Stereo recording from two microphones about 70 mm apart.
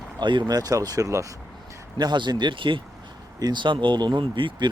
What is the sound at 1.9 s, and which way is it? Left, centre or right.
Speech, right.